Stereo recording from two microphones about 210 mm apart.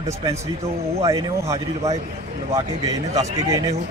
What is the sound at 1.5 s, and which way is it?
Speech, 30° right (ahead or behind).